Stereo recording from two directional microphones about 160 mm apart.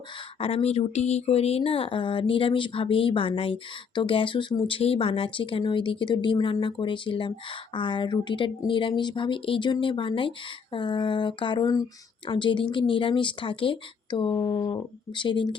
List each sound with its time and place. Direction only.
0.3 s speech: 35° left (ahead or behind)